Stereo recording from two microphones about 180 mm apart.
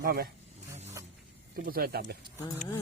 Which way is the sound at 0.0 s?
60° right (ahead or behind).